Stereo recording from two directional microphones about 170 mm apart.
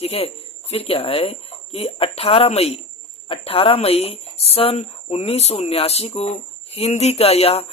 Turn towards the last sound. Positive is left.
turn(degrees=35)  # may be behind; listen again after turning